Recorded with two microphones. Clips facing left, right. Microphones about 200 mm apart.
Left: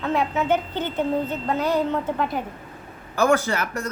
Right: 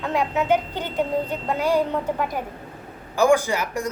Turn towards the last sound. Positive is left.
turn(degrees=-15)  # may be behind; listen again after turning